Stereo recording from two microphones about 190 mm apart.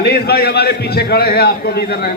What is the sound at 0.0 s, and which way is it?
A man's voice, 55° left (ahead or behind).